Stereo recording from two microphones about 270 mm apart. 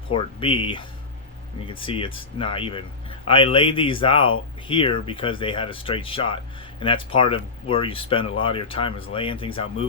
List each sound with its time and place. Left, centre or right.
0.1 s speech: centre